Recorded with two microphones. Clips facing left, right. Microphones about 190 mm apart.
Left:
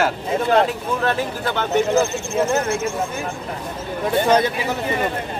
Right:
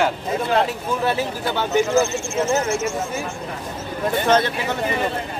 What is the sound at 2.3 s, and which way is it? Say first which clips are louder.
Speech: left 1 dB; 60° left (ahead or behind).